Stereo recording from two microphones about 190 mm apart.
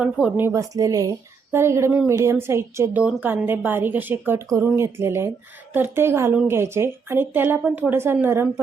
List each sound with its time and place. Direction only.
0.0 s a woman's voice: 5° right (ahead or behind)